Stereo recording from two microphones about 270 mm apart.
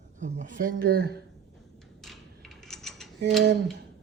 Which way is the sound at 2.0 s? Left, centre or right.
Centre.